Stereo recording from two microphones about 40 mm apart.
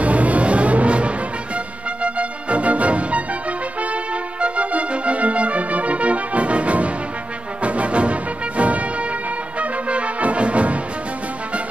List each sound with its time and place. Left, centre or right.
0.0 s music: right